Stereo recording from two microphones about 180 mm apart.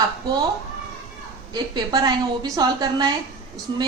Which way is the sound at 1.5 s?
25° right (ahead or behind).